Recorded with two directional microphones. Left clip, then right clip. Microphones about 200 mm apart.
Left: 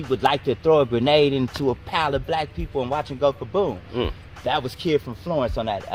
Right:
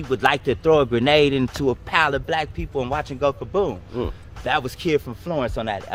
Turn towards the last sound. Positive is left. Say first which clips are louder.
# left 1 dB
turn(degrees=-10)  # may be behind; listen again after turning